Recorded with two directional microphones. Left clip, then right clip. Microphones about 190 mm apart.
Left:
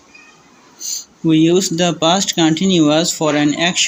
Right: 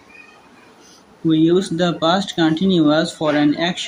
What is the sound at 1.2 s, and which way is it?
Speech, 30° left (ahead or behind).